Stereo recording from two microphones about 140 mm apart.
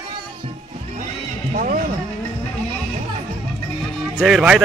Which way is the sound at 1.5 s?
75° right (ahead or behind).